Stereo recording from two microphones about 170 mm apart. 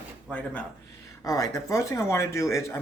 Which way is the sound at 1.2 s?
20° left (ahead or behind).